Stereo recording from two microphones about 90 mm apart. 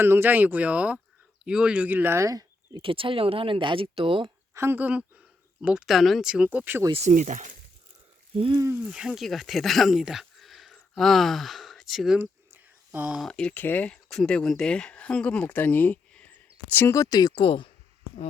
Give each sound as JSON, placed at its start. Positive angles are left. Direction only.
{"t": 0.0, "sound": "speech", "side_deg": -25}
{"t": 2.1, "sound": "speech", "side_deg": -40}
{"t": 2.8, "sound": "speech", "side_deg": -85}
{"t": 4.5, "sound": "speech", "side_deg": -30}
{"t": 4.8, "sound": "speech", "side_deg": -15}
{"t": 6.3, "sound": "speech", "side_deg": -15}
{"t": 8.6, "sound": "speech", "side_deg": -25}
{"t": 8.9, "sound": "speech", "side_deg": -5}
{"t": 12.2, "sound": "a sound", "side_deg": -20}
{"t": 13.2, "sound": "speech", "side_deg": 10}
{"t": 13.5, "sound": "speech", "side_deg": 20}
{"t": 16.9, "sound": "speech", "side_deg": 40}
{"t": 17.4, "sound": "speech", "side_deg": 70}